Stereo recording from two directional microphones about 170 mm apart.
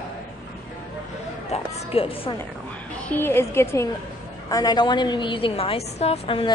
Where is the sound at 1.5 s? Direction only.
35° left (ahead or behind).